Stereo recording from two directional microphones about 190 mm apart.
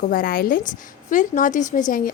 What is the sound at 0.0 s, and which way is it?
A woman's voice, 50° left (ahead or behind).